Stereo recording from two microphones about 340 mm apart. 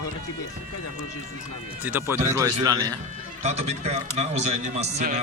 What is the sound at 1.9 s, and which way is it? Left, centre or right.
A man's voice, centre.